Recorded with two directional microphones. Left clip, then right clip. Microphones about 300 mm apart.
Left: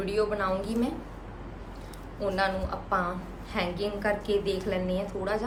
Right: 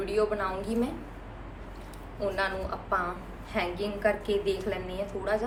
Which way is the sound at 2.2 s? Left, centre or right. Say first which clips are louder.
Left 2 dB; centre.